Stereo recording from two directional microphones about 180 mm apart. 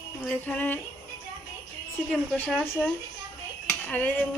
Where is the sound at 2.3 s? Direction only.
5° left (ahead or behind).